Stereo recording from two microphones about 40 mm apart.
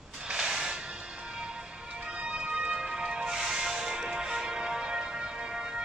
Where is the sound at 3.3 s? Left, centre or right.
Centre.